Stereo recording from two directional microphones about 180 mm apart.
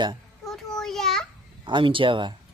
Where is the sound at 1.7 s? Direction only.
30° right (ahead or behind).